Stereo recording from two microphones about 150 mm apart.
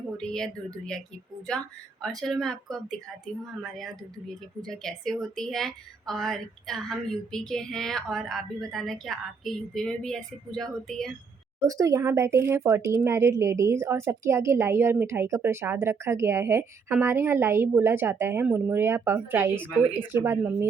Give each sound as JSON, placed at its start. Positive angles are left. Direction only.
{"t": 0.2, "sound": "a woman's voice", "side_deg": 5}
{"t": 11.6, "sound": "a woman's voice", "side_deg": -25}